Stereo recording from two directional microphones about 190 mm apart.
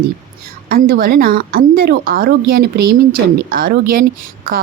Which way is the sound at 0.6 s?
50° right (ahead or behind).